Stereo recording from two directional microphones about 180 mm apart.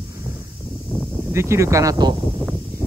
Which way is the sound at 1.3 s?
15° right (ahead or behind).